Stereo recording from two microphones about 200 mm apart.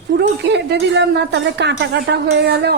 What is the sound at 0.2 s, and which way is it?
Speech, 60° right (ahead or behind).